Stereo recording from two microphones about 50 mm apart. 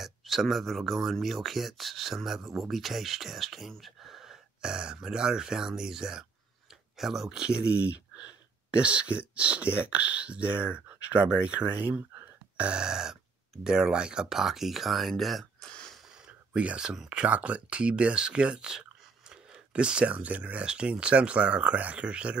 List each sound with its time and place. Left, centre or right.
0.0 s speech: centre
7.3 s speech: right
11.7 s speech: right
12.5 s speech: centre
16.3 s a sound: right
17.1 s speech: right